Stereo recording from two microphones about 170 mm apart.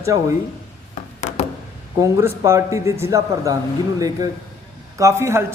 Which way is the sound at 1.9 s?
20° right (ahead or behind).